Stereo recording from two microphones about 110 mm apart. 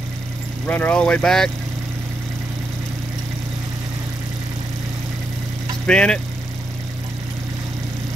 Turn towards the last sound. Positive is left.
turn(degrees=10)  # may be behind; listen again after turning